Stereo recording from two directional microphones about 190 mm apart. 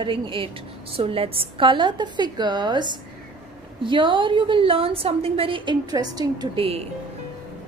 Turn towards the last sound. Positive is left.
turn(degrees=-30)  # may be behind; listen again after turning